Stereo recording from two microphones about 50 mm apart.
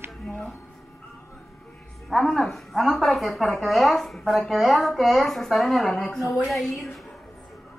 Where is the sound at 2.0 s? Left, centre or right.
Centre.